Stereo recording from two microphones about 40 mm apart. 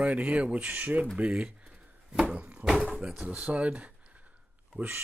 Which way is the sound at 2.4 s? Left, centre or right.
Right.